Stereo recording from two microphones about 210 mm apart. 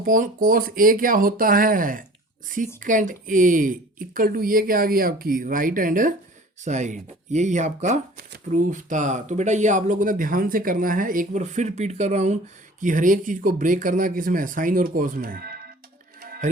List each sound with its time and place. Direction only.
0.0 s speech: 40° right (ahead or behind)
16.2 s music: 45° right (ahead or behind)